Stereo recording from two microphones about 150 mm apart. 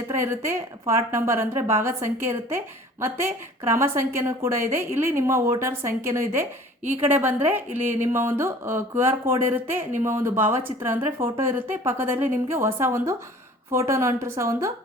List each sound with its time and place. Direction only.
0.2 s a woman's voice: 15° right (ahead or behind)
3.7 s a woman's voice: 20° right (ahead or behind)